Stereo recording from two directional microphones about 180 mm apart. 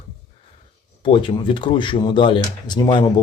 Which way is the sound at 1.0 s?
30° left (ahead or behind).